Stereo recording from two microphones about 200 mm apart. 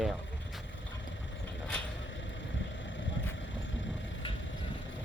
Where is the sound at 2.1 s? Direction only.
65° left (ahead or behind).